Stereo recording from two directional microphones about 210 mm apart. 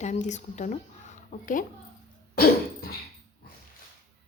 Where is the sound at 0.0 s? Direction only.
35° left (ahead or behind).